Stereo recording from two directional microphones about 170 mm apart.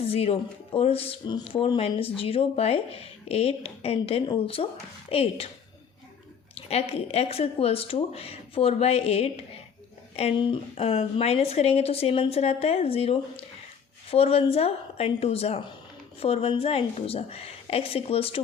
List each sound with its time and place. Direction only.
0.0 s speech: 35° left (ahead or behind)
6.5 s speech: 35° left (ahead or behind)